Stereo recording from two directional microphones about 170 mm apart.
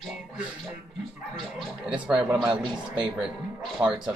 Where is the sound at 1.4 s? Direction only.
Centre (ahead or behind).